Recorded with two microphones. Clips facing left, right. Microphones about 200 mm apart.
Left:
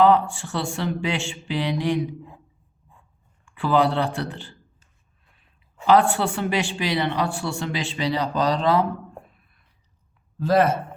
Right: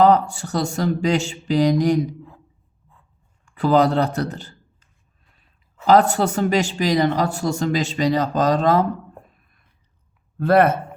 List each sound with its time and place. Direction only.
0.0 s speech: 40° right (ahead or behind)
3.4 s speech: 40° right (ahead or behind)
5.8 s speech: 40° right (ahead or behind)
10.3 s speech: 60° right (ahead or behind)